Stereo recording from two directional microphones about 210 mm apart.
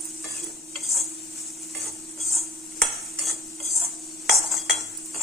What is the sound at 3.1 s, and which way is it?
Stir, centre (ahead or behind).